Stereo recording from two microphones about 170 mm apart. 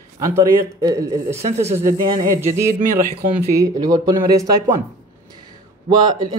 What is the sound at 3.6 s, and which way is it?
Speech, 20° right (ahead or behind).